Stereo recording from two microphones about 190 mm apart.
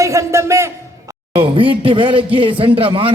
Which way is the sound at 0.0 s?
15° right (ahead or behind).